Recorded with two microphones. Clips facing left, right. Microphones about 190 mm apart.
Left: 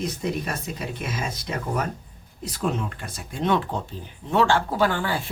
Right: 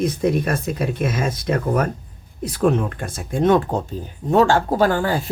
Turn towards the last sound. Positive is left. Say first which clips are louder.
# right 5 dB
turn(degrees=-40)  # may be behind; listen again after turning